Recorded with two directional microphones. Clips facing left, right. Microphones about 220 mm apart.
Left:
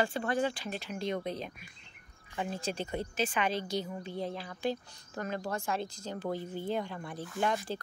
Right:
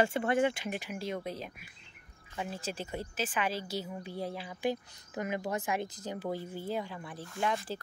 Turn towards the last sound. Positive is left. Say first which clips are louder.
# left 1 dB
turn(degrees=0)  # may be behind; listen again after turning